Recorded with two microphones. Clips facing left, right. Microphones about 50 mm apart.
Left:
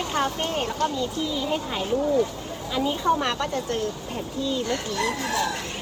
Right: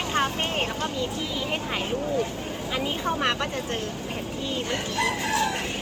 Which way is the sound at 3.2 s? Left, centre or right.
Right.